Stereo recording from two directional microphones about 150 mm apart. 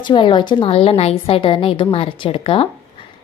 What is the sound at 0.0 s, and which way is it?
A woman's voice, 30° left (ahead or behind).